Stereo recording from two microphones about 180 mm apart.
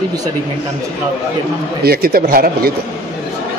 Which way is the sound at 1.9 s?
60° right (ahead or behind).